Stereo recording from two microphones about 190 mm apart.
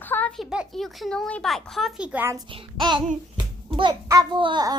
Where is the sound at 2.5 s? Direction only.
25° right (ahead or behind).